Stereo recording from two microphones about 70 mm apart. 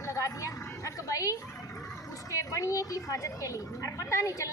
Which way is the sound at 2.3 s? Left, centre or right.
Left.